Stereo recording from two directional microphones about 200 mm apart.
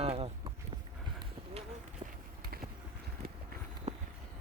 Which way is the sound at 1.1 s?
30° right (ahead or behind).